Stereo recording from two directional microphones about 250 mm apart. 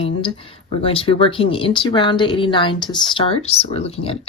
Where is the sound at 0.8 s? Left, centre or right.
Left.